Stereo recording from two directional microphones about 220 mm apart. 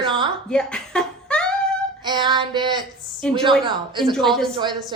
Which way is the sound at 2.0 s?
20° right (ahead or behind).